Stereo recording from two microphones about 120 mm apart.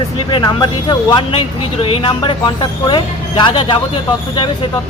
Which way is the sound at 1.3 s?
50° left (ahead or behind).